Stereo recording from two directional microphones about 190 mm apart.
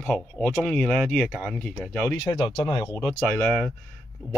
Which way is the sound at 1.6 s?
5° left (ahead or behind).